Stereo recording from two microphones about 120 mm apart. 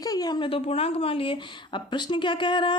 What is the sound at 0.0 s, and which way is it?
Speech, 30° left (ahead or behind).